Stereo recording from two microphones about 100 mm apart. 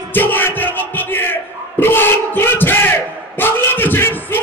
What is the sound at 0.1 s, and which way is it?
Battle cry, 20° left (ahead or behind).